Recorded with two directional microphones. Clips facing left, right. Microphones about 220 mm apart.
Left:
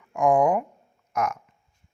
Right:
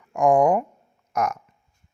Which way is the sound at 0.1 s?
45° right (ahead or behind).